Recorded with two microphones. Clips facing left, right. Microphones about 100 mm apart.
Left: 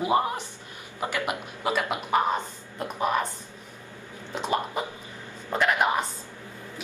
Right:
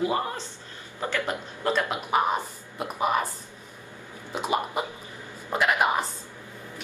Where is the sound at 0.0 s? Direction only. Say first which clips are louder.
Left 3 dB; 20° left (ahead or behind).